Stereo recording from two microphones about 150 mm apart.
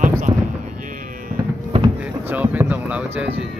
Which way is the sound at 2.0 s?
10° right (ahead or behind).